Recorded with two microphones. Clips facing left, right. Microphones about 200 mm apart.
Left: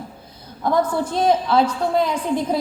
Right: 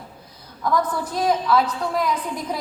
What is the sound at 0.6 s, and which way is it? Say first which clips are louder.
A woman's voice: left 3 dB; 25° left (ahead or behind).